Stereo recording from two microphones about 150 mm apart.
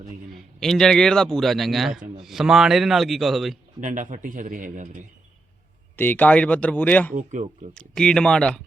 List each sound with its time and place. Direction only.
0.6 s a man's voice: 5° left (ahead or behind)
3.8 s speech: 55° right (ahead or behind)
6.0 s speech: 10° left (ahead or behind)
7.1 s speech: 55° right (ahead or behind)
7.7 s a man's voice: 5° left (ahead or behind)